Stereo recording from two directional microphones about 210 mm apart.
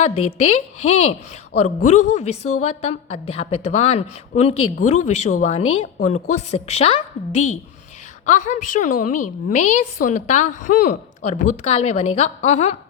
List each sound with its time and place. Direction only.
0.0 s a woman's voice: 30° left (ahead or behind)